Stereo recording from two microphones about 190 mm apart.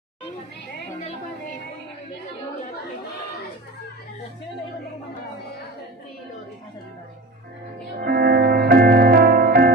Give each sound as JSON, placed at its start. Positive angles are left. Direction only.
{"t": 8.0, "sound": "music", "side_deg": -55}